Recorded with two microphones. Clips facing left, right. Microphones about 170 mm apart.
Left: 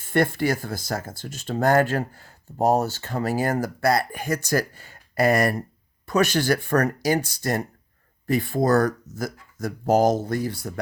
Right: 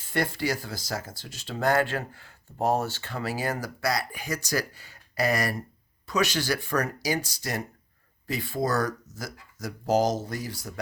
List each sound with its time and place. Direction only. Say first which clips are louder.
0.0 s speech: left 6 dB; 55° left (ahead or behind)